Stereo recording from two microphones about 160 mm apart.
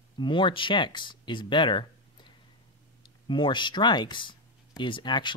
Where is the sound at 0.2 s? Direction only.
30° left (ahead or behind).